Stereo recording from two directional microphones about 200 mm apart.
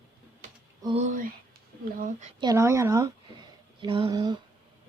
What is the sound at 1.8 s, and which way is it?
Speech, 40° right (ahead or behind).